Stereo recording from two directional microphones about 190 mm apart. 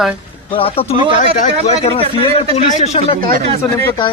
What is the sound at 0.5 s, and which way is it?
Speech, 30° left (ahead or behind).